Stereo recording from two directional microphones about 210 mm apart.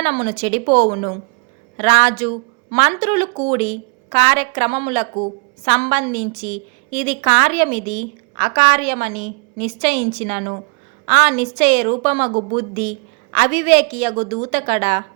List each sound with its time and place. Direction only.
0.0 s a woman's voice: 35° right (ahead or behind)